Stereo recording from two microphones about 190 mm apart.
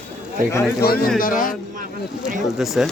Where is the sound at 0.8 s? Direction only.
55° left (ahead or behind).